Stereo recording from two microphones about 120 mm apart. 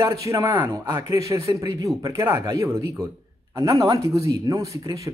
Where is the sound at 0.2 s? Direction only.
25° right (ahead or behind).